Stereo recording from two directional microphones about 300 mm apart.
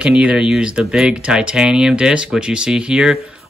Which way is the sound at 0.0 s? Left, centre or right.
Centre.